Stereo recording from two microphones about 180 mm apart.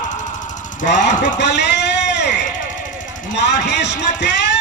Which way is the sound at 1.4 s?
70° left (ahead or behind).